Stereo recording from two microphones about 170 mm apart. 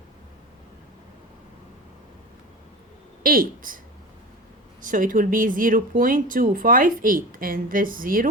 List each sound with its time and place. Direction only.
3.2 s speech: 55° right (ahead or behind)
4.8 s speech: 50° right (ahead or behind)